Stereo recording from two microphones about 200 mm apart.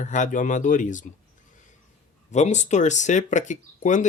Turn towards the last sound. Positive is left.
turn(degrees=40)  # may be behind; listen again after turning